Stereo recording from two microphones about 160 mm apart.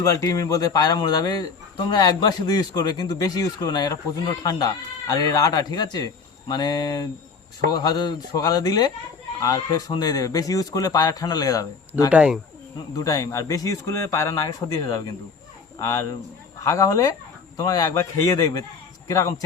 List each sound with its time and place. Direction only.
0.2 s a man's voice: 20° left (ahead or behind)
12.1 s speech: 5° right (ahead or behind)
13.0 s a man's voice: 20° left (ahead or behind)
16.6 s a man's voice: 20° left (ahead or behind)